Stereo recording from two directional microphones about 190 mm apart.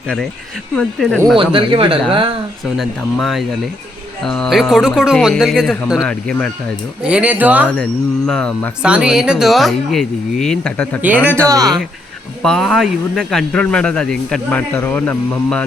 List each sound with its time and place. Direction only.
0.8 s speech: centre (ahead or behind)
1.4 s speech: 25° right (ahead or behind)
2.7 s speech: centre (ahead or behind)
7.0 s speech: 5° right (ahead or behind)
8.3 s speech: 5° left (ahead or behind)
11.0 s speech: 10° right (ahead or behind)
11.4 s speech: 20° right (ahead or behind)
12.4 s speech: centre (ahead or behind)